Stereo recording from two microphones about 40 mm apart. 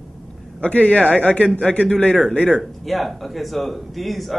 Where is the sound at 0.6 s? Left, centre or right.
Left.